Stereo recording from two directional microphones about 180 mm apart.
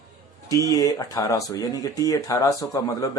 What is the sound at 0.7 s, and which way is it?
Speech, 20° left (ahead or behind).